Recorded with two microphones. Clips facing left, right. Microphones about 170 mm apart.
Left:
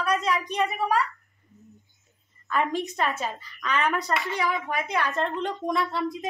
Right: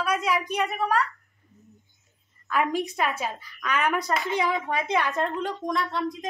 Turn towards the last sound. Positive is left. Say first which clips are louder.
# left 1 dB
turn(degrees=5)  # may be behind; listen again after turning